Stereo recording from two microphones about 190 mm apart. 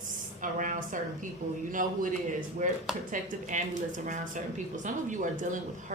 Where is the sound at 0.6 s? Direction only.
45° right (ahead or behind).